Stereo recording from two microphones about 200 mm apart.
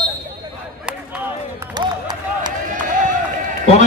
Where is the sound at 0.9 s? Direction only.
10° right (ahead or behind).